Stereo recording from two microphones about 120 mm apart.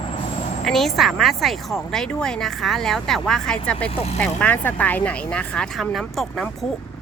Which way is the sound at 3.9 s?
60° left (ahead or behind).